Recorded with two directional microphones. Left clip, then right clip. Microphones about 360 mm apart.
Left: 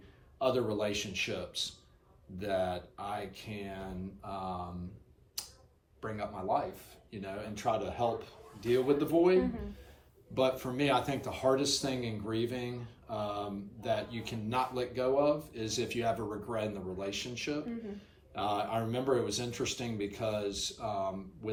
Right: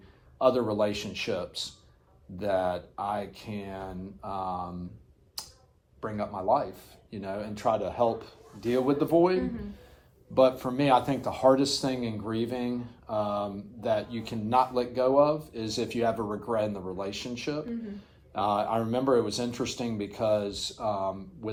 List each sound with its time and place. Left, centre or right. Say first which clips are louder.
0.3 s speech: right 7 dB; centre
5.4 s a sound: right 2 dB; centre
6.0 s speech: right 5 dB; centre